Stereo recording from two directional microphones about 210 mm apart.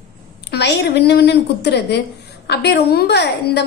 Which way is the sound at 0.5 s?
55° left (ahead or behind).